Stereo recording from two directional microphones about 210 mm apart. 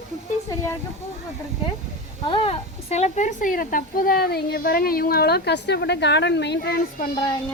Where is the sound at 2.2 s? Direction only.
25° left (ahead or behind); by 7.1 s 45° left (ahead or behind).